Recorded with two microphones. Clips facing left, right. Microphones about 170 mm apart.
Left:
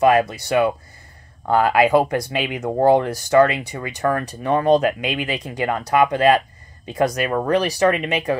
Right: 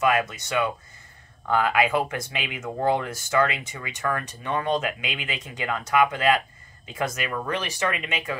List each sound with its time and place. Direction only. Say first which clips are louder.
0.0 s speech: left 7 dB; 35° left (ahead or behind)